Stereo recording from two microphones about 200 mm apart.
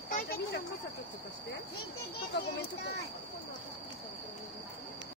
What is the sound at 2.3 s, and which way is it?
Speech, 55° left (ahead or behind).